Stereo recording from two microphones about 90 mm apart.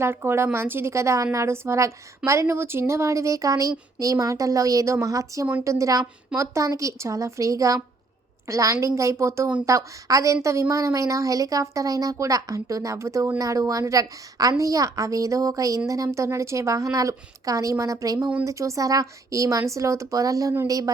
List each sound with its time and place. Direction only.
0.0 s a woman's voice: 25° right (ahead or behind)